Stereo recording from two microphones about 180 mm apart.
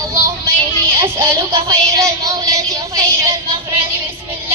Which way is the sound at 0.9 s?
15° right (ahead or behind).